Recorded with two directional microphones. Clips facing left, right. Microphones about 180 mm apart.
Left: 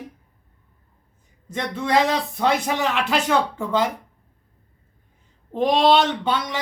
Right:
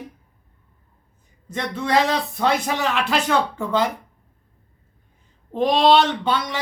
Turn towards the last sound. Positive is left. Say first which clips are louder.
# right 1 dB
turn(degrees=15)  # may be behind; listen again after turning